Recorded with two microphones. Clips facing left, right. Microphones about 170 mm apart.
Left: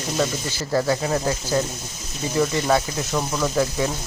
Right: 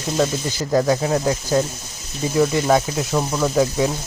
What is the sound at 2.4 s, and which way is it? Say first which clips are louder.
Speech: right 3 dB; 10° right (ahead or behind).